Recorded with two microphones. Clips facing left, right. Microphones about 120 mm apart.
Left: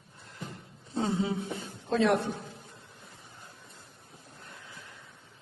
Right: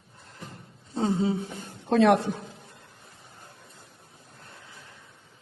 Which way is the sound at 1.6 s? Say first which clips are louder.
Right 6 dB; 65° right (ahead or behind).